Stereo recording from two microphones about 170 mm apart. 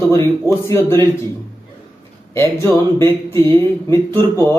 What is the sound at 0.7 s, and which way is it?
Speech, 15° left (ahead or behind).